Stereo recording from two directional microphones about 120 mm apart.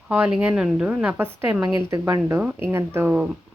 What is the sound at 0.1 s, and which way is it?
A woman's voice, 10° right (ahead or behind).